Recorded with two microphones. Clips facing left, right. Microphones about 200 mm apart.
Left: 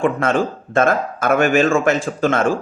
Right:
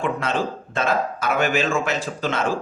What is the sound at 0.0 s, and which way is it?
A man's voice, 50° left (ahead or behind).